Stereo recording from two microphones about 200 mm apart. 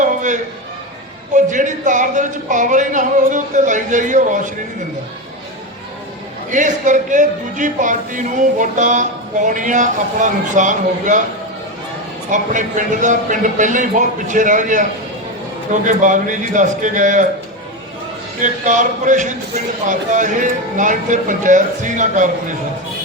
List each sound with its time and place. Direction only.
0.0 s a sound: 40° right (ahead or behind)
1.3 s speech: 40° right (ahead or behind)
6.5 s speech: 40° right (ahead or behind)
12.3 s speech: 40° right (ahead or behind)
18.4 s speech: 40° right (ahead or behind)